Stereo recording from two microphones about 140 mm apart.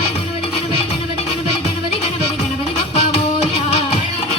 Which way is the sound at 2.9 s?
50° left (ahead or behind).